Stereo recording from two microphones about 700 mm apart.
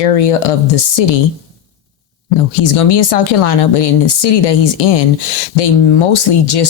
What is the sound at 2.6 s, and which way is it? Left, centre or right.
Speech, left.